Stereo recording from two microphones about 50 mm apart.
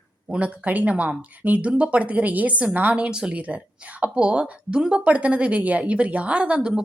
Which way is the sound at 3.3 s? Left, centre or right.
Right.